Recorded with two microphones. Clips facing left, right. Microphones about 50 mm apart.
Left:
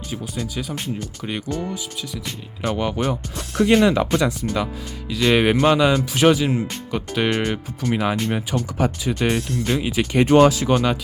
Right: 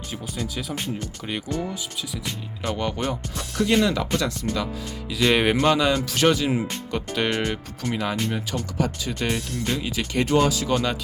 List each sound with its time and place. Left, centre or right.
0.1 s speech: centre
2.6 s speech: centre
5.0 s speech: centre
6.5 s speech: centre
6.9 s speech: centre